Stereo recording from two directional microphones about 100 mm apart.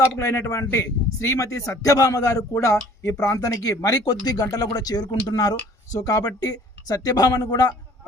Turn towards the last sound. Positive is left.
turn(degrees=40)  # may be behind; listen again after turning